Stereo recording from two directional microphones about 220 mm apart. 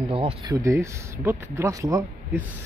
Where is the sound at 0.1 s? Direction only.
25° right (ahead or behind).